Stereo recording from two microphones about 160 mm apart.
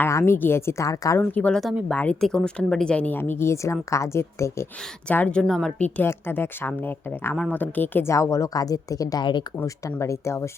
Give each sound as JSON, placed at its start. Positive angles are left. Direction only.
{"t": 0.0, "sound": "speech", "side_deg": 15}